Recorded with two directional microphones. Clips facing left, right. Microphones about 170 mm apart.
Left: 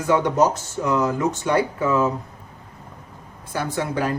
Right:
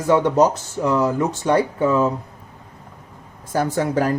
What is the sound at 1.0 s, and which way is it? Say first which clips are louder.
Speech: right 2 dB; 35° right (ahead or behind).